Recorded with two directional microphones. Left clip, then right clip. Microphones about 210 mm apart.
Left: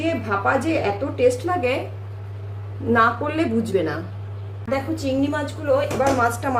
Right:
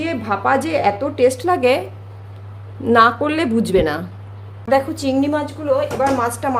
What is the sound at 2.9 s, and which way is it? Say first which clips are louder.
A woman's voice: right 5 dB; 50° right (ahead or behind).